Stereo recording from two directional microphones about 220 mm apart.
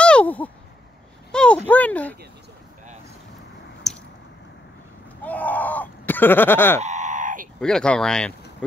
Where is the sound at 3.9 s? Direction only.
Centre (ahead or behind).